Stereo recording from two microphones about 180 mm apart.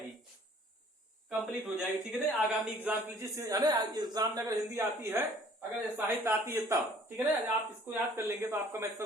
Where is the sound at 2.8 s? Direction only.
10° right (ahead or behind).